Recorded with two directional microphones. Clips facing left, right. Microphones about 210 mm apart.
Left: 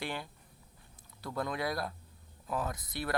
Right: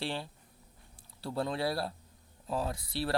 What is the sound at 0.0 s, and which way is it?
Speech, 30° right (ahead or behind).